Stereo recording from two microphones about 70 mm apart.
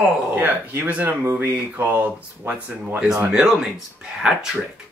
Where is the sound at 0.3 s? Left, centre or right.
Right.